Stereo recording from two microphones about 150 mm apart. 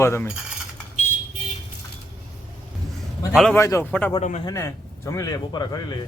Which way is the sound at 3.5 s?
20° left (ahead or behind).